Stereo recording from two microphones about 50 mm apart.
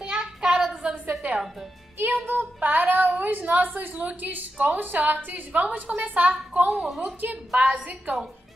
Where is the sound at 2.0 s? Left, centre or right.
Right.